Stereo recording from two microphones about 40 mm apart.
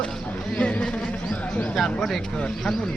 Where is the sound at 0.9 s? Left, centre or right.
Left.